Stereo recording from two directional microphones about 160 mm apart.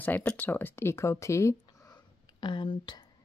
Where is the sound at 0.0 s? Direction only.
10° left (ahead or behind); by 3.1 s 30° left (ahead or behind).